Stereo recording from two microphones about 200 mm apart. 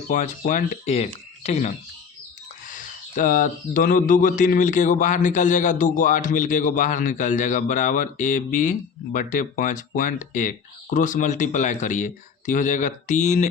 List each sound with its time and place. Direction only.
0.1 s speech: 40° left (ahead or behind)